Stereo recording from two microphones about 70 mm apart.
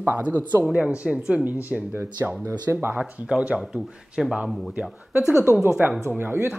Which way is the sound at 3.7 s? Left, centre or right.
Centre.